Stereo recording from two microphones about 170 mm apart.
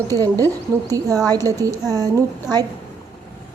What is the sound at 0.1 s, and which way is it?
Speech, 20° right (ahead or behind).